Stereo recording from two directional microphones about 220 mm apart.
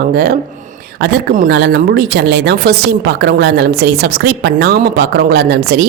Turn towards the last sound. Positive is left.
turn(degrees=-45)  # may be behind; listen again after turning